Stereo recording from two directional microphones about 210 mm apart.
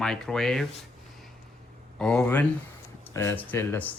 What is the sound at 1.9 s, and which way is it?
Speech, 5° left (ahead or behind).